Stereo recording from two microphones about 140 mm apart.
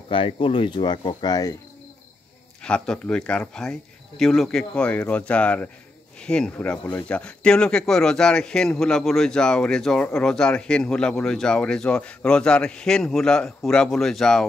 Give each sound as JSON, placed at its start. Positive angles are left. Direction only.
{"t": 0.1, "sound": "speech", "side_deg": 40}
{"t": 2.6, "sound": "speech", "side_deg": 5}